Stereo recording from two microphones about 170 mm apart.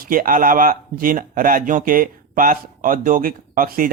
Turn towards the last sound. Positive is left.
turn(degrees=-55)  # may be behind; listen again after turning